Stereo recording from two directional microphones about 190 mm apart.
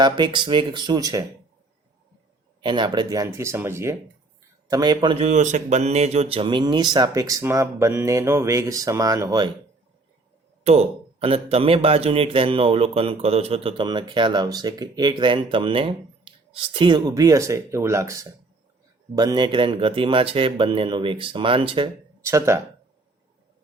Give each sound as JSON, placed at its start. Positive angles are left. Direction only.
{"t": 0.0, "sound": "speech", "side_deg": -25}
{"t": 2.6, "sound": "speech", "side_deg": -25}
{"t": 10.6, "sound": "speech", "side_deg": -35}
{"t": 22.3, "sound": "speech", "side_deg": -15}